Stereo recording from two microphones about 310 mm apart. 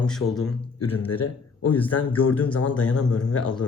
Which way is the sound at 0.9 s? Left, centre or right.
Centre.